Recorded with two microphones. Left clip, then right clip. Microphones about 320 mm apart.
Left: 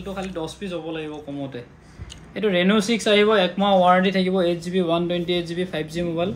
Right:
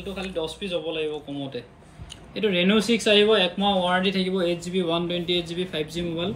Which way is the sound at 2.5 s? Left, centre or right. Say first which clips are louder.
Left 2 dB; left.